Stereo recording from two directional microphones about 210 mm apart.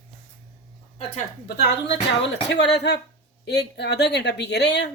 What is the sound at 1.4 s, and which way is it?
A woman's voice, 55° left (ahead or behind).